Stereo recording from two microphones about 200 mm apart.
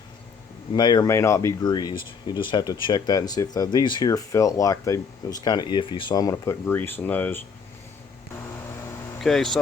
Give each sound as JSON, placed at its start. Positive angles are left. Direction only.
{"t": 0.7, "sound": "speech", "side_deg": 20}
{"t": 9.2, "sound": "speech", "side_deg": 0}